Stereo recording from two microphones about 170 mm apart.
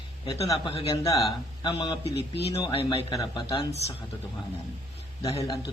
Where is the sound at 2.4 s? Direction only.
35° left (ahead or behind).